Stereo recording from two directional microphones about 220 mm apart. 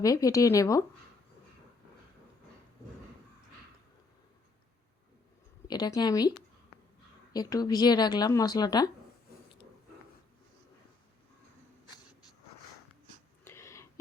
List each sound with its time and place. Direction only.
0.0 s speech: 15° left (ahead or behind)
5.6 s speech: 20° left (ahead or behind)
13.4 s whispering: 10° left (ahead or behind)